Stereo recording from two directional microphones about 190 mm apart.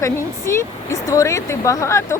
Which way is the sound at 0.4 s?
15° left (ahead or behind).